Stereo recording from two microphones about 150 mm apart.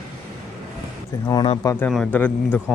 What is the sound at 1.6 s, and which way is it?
Speech, 15° left (ahead or behind).